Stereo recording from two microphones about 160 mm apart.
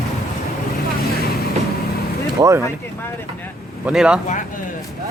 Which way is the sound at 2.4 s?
25° right (ahead or behind).